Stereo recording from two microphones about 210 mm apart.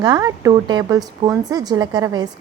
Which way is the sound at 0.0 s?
20° right (ahead or behind).